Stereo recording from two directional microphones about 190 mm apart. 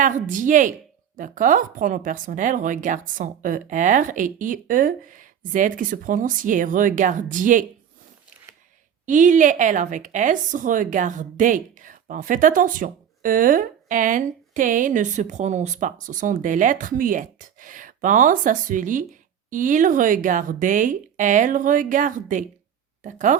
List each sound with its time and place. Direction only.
0.0 s a woman's voice: 45° right (ahead or behind)
9.0 s a woman's voice: 40° right (ahead or behind)